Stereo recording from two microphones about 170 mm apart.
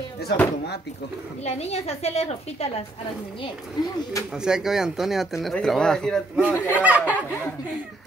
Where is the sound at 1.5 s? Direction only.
40° left (ahead or behind).